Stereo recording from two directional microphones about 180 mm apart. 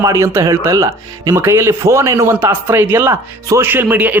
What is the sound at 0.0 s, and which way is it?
Speech, 15° right (ahead or behind).